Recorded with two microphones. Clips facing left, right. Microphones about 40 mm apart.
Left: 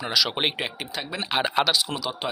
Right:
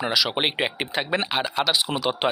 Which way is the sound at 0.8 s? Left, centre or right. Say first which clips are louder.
Right 7 dB; right.